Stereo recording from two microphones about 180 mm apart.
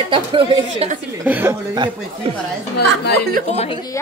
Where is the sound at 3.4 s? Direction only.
35° left (ahead or behind).